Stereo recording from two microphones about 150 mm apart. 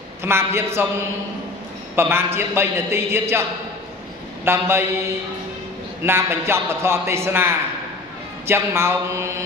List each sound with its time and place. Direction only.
0.2 s a man's voice: 15° right (ahead or behind)
2.0 s a man's voice: 15° right (ahead or behind)
4.5 s a man's voice: 15° right (ahead or behind)
6.0 s a man's voice: 15° right (ahead or behind)